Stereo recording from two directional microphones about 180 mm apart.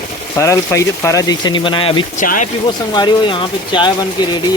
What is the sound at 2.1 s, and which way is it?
Speech, 45° left (ahead or behind).